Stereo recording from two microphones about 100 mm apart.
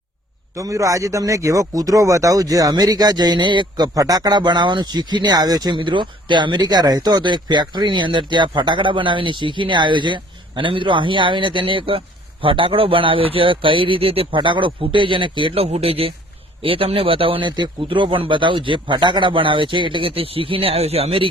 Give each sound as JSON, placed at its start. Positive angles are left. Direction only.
{"t": 0.5, "sound": "speech", "side_deg": -35}
{"t": 3.9, "sound": "speech", "side_deg": -40}
{"t": 5.7, "sound": "speech", "side_deg": -55}